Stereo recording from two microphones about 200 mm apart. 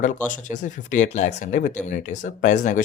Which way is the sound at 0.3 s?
40° left (ahead or behind).